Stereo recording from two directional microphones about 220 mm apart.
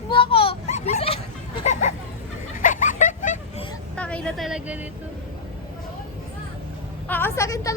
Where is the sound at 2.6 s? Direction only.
35° left (ahead or behind).